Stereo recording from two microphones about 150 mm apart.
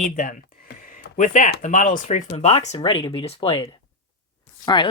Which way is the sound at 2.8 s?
35° left (ahead or behind).